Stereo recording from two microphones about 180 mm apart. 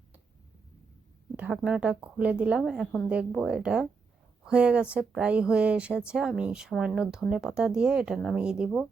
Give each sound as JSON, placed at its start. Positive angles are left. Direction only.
{"t": 1.4, "sound": "speech", "side_deg": -5}